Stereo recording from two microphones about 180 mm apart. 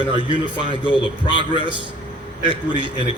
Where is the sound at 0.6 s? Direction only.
25° left (ahead or behind).